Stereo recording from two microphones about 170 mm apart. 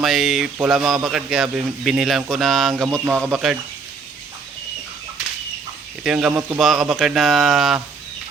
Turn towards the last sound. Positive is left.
turn(degrees=0)  # may be behind; listen again after turning